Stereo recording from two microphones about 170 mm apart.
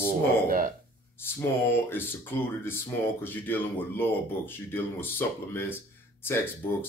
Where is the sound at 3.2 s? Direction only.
10° left (ahead or behind).